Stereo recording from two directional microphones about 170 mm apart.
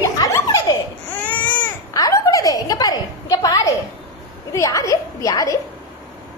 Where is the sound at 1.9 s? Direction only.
20° left (ahead or behind).